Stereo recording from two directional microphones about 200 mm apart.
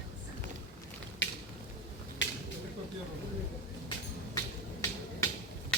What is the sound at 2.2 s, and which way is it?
Finger snapping, 65° left (ahead or behind).